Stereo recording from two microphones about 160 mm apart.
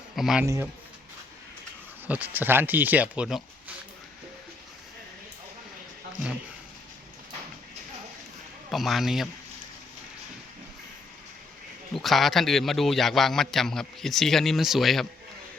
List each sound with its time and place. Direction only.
0.2 s a man's voice: centre (ahead or behind)
0.4 s speech: 20° right (ahead or behind)
2.0 s speech: 10° right (ahead or behind)
8.7 s a man's voice: centre (ahead or behind)
11.9 s a man's voice: centre (ahead or behind)